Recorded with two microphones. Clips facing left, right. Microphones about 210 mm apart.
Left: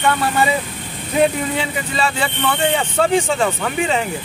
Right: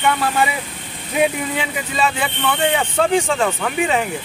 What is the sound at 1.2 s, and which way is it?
Speech, 5° right (ahead or behind).